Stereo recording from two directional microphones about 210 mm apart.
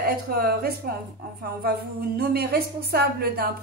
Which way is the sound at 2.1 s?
50° right (ahead or behind).